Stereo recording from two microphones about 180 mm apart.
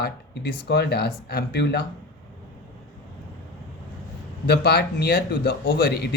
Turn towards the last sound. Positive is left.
turn(degrees=65)  # may be behind; listen again after turning